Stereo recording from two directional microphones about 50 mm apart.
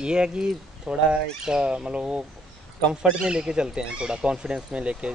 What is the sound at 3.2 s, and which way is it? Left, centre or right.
Speech, centre.